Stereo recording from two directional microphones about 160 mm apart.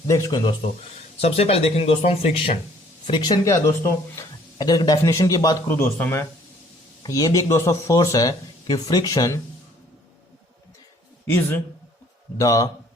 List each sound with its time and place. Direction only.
0.1 s speech: 20° left (ahead or behind)
1.2 s speech: 40° left (ahead or behind)
3.1 s speech: 25° left (ahead or behind)
11.3 s a man's voice: 15° left (ahead or behind)